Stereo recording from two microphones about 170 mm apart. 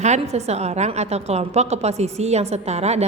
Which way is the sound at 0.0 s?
40° right (ahead or behind).